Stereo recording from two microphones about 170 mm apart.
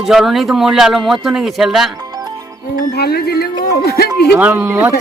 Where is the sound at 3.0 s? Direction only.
70° left (ahead or behind).